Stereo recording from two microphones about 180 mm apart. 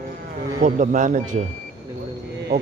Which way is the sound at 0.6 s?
45° right (ahead or behind).